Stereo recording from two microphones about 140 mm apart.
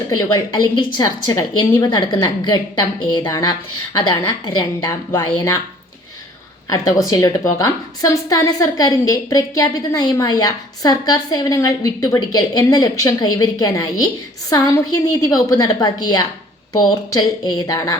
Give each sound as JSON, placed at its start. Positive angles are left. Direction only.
{"t": 0.2, "sound": "a woman's voice", "side_deg": 25}
{"t": 6.7, "sound": "a woman's voice", "side_deg": 25}
{"t": 15.2, "sound": "a woman's voice", "side_deg": 25}